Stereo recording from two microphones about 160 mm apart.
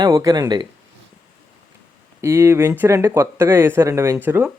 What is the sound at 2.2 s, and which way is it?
Speech, 15° right (ahead or behind).